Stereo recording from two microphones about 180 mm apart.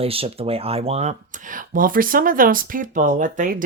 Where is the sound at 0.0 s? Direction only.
30° right (ahead or behind).